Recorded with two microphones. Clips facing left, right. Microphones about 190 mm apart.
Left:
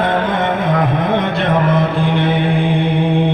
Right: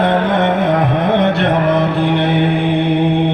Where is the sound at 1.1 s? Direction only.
65° right (ahead or behind).